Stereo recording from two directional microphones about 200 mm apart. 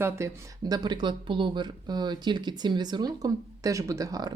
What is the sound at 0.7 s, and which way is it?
Speech, 20° right (ahead or behind).